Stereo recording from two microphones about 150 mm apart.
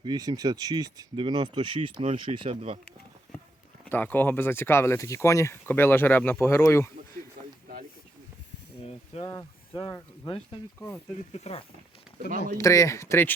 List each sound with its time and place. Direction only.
0.0 s speech: 25° right (ahead or behind)
3.8 s speech: 10° left (ahead or behind)
9.1 s speech: 45° left (ahead or behind)
10.8 s speech: 15° left (ahead or behind)
11.3 s speech: 45° left (ahead or behind)
12.5 s speech: 20° left (ahead or behind)